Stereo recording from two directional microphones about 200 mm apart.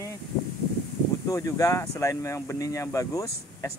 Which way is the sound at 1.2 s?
15° left (ahead or behind).